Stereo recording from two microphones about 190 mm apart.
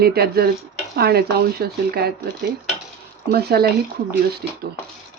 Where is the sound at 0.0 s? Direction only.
55° right (ahead or behind).